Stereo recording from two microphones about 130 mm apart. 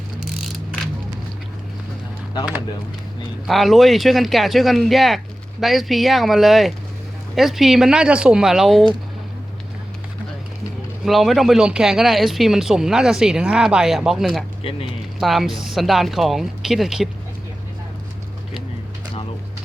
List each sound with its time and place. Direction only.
3.4 s speech: centre (ahead or behind)
11.0 s speech: centre (ahead or behind)
14.6 s speech: 45° left (ahead or behind)
15.2 s speech: centre (ahead or behind)